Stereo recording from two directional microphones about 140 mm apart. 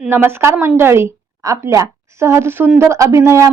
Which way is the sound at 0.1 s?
15° right (ahead or behind).